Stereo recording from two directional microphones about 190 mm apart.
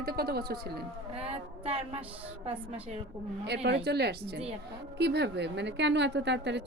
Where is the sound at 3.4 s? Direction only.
60° right (ahead or behind).